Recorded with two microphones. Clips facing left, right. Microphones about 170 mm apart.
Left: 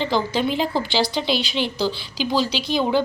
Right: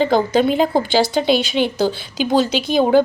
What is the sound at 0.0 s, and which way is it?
A woman's voice, 45° right (ahead or behind).